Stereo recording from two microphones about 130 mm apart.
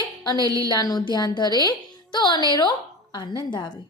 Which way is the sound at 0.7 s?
30° left (ahead or behind).